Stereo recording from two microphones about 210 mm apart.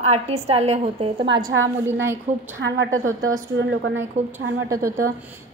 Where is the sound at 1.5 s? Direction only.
70° right (ahead or behind).